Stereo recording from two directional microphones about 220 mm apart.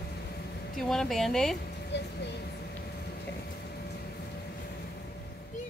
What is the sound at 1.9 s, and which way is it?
Speech, 50° left (ahead or behind).